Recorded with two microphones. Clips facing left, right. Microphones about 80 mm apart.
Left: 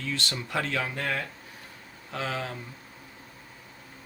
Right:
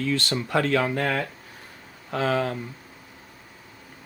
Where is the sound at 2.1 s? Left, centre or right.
Right.